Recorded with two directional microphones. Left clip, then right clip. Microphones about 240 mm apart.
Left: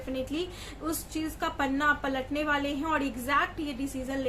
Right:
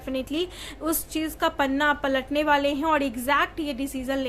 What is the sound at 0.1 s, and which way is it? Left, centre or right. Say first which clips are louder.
A woman's voice: right 5 dB; right.